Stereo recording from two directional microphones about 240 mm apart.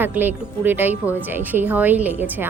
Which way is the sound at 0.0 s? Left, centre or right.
Centre.